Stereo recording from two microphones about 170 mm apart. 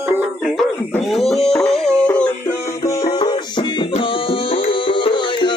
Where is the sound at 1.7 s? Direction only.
5° left (ahead or behind).